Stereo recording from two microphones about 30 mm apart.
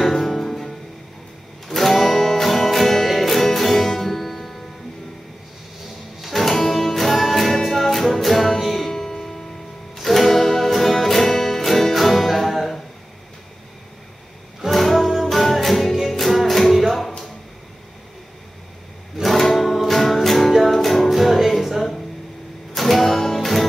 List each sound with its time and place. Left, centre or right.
0.1 s music: centre
6.2 s music: centre
8.9 s music: centre
9.9 s music: centre
14.7 s music: centre
16.7 s music: centre
19.2 s music: centre